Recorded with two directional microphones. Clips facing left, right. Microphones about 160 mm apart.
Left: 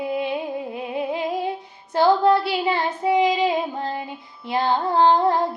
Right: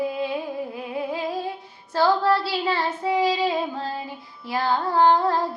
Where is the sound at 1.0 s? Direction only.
20° left (ahead or behind).